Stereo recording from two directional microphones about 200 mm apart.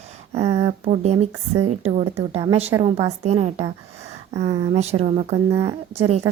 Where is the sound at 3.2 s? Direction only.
35° right (ahead or behind).